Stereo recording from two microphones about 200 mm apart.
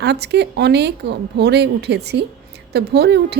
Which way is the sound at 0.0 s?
55° right (ahead or behind).